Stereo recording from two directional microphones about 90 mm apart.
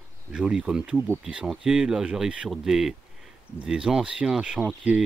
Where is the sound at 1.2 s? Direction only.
5° right (ahead or behind).